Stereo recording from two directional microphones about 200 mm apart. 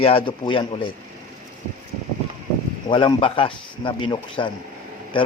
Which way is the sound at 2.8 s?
25° left (ahead or behind).